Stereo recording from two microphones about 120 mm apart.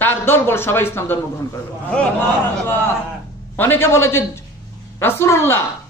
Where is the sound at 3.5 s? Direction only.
20° left (ahead or behind).